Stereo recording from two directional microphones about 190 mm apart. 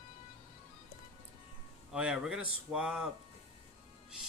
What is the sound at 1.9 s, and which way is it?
Speech, 5° right (ahead or behind).